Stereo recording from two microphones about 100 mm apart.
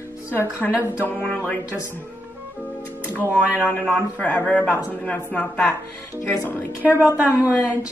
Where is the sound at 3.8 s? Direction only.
15° left (ahead or behind).